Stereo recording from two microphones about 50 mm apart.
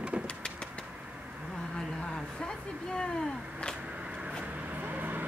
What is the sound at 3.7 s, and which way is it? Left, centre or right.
Vehicle, right.